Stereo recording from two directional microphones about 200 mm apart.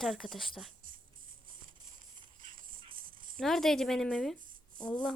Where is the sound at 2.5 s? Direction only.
25° right (ahead or behind).